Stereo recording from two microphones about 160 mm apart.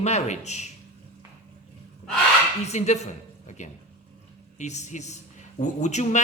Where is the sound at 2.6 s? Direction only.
45° left (ahead or behind).